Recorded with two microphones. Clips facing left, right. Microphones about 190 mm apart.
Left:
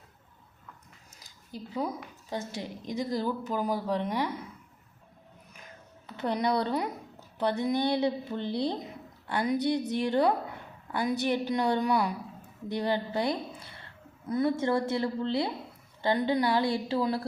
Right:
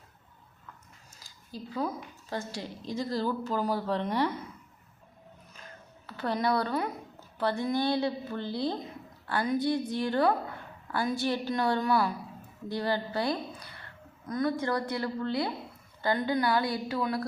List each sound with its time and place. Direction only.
1.2 s a sound: 20° left (ahead or behind)
2.3 s a woman's voice: 20° left (ahead or behind)
6.1 s a woman's voice: 20° left (ahead or behind)